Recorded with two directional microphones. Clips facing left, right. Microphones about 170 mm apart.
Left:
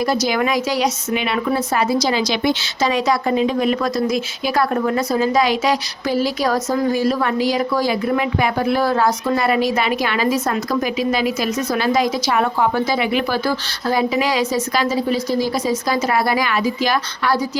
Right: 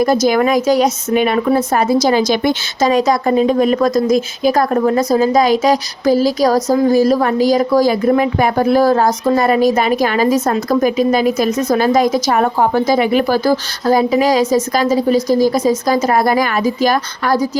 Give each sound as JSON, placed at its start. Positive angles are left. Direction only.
{"t": 0.0, "sound": "speech", "side_deg": -45}